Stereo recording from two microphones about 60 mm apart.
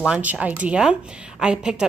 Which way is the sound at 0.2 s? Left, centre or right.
Right.